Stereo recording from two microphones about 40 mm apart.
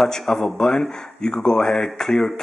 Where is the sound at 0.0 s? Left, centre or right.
Centre.